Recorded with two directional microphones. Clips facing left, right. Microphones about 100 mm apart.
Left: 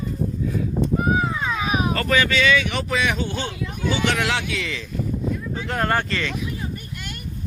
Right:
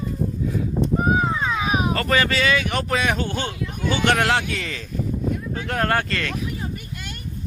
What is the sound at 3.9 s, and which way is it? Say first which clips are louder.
Speech: right 4 dB; 55° right (ahead or behind).